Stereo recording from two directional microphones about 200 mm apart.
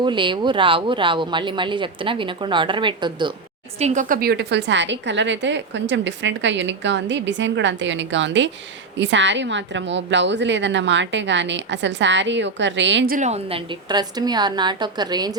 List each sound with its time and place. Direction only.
0.0 s speech: 25° right (ahead or behind)
3.8 s a woman's voice: 35° right (ahead or behind); by 13.1 s 65° right (ahead or behind)
13.1 s speech: 35° right (ahead or behind); by 15.4 s 20° right (ahead or behind)